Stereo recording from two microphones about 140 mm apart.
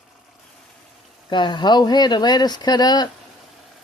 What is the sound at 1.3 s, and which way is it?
Speech, 35° left (ahead or behind).